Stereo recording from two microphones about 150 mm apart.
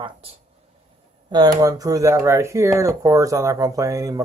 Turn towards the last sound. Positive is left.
turn(degrees=-20)  # may be behind; listen again after turning